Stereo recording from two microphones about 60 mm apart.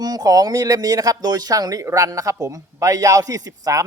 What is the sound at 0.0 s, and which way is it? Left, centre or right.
Speech, right.